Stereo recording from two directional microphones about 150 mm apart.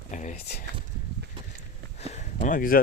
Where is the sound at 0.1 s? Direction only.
55° left (ahead or behind).